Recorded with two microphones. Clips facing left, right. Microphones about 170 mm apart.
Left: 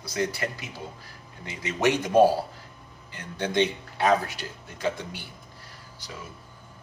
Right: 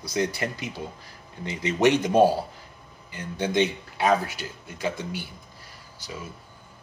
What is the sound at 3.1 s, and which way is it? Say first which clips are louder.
Speech: right 2 dB; 10° right (ahead or behind).